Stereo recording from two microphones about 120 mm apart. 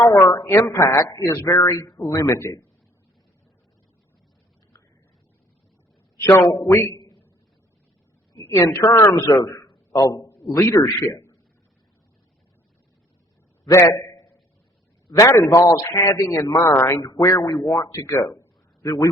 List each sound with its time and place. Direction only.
0.0 s a man's voice: 30° left (ahead or behind)
6.7 s a man's voice: 25° left (ahead or behind)
8.3 s a woman's voice: 25° left (ahead or behind)
10.1 s a sound: 30° left (ahead or behind)
10.6 s a man's voice: 25° left (ahead or behind)
13.7 s a man's voice: 25° left (ahead or behind)
15.2 s a man's voice: 25° left (ahead or behind)